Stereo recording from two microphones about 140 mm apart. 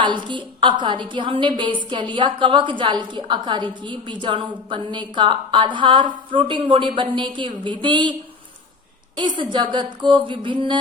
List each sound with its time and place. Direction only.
0.0 s a woman's voice: 35° right (ahead or behind)
9.1 s a woman's voice: 35° right (ahead or behind)